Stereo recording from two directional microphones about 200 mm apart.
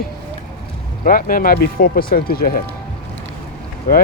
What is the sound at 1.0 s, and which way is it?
Speech, 45° left (ahead or behind).